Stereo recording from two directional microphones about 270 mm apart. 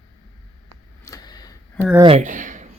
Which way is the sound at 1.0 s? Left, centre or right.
Centre.